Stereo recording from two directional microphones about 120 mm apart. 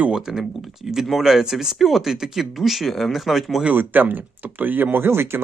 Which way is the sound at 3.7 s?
15° right (ahead or behind).